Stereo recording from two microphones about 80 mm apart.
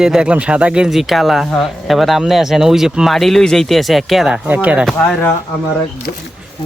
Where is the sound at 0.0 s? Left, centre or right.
Centre.